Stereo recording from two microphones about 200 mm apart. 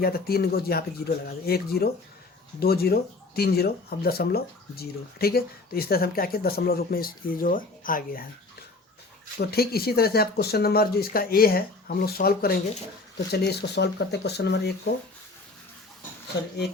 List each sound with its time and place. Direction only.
0.0 s speech: 50° left (ahead or behind)
9.4 s speech: 50° left (ahead or behind)
16.3 s speech: 60° left (ahead or behind)